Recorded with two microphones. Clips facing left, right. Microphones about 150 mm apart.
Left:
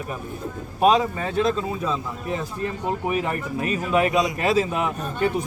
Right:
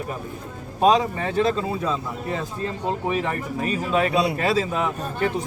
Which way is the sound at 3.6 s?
30° right (ahead or behind).